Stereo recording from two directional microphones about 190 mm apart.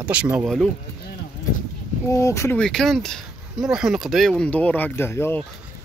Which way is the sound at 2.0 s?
15° left (ahead or behind).